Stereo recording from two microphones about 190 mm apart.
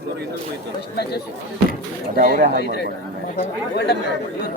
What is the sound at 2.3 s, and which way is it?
Speech, 55° right (ahead or behind).